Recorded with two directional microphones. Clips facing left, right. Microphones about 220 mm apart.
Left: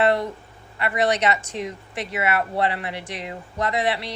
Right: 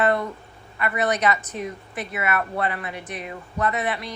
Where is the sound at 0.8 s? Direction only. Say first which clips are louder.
Left 2 dB; 30° left (ahead or behind).